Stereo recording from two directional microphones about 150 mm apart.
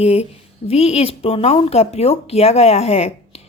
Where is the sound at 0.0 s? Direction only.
40° left (ahead or behind).